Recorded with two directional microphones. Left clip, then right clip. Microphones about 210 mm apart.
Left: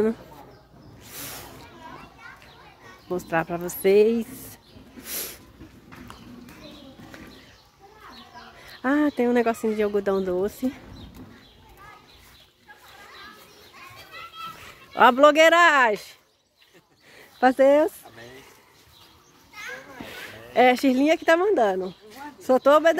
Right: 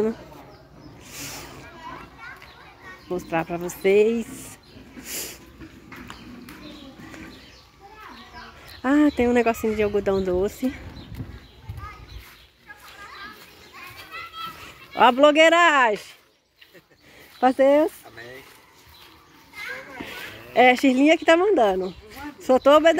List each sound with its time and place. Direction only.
1.1 s snake: 10° left (ahead or behind)
3.1 s a woman's voice: 10° left (ahead or behind)
5.0 s snort: 10° left (ahead or behind)
8.6 s speech: 5° left (ahead or behind)
15.0 s a woman's voice: 10° left (ahead or behind)
17.4 s a woman's voice: 5° left (ahead or behind)
20.0 s speech: centre (ahead or behind)